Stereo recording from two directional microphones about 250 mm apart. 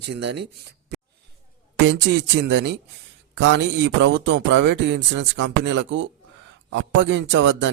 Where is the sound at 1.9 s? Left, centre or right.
Right.